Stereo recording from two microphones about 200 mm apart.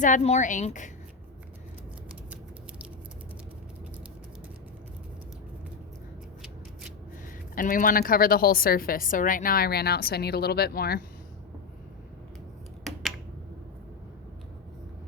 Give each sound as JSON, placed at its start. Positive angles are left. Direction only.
{"t": 0.0, "sound": "a woman's voice", "side_deg": 35}
{"t": 7.5, "sound": "a woman's voice", "side_deg": 45}
{"t": 12.8, "sound": "finger snapping", "side_deg": 0}